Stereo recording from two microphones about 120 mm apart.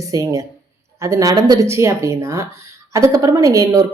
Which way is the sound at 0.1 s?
30° right (ahead or behind).